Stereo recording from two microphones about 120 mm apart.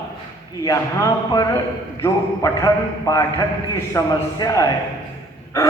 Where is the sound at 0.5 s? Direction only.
30° left (ahead or behind).